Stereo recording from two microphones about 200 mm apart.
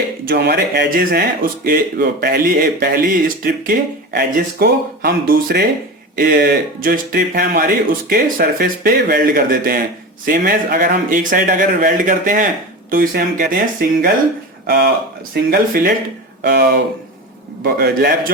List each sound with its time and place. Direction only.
0.3 s speech: 55° right (ahead or behind)
15.4 s speech: 45° right (ahead or behind)